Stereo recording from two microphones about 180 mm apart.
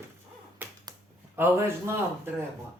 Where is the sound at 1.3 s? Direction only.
10° right (ahead or behind).